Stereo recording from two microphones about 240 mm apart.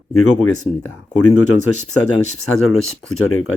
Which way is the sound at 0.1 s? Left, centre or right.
Left.